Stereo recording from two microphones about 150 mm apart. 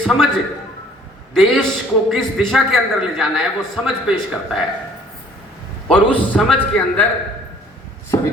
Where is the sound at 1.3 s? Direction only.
5° left (ahead or behind).